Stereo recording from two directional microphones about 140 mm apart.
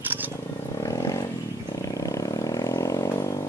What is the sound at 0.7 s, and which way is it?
Wild animals, 25° left (ahead or behind).